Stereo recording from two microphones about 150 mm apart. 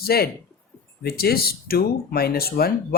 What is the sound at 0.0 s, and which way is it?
Speech, 90° left.